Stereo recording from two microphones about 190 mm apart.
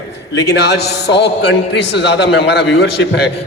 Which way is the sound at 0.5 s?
60° left (ahead or behind).